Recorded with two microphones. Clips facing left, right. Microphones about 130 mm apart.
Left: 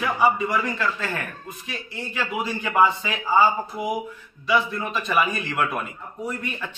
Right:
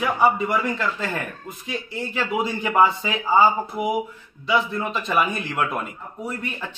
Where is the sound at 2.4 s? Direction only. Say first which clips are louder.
Right 1 dB; 20° right (ahead or behind).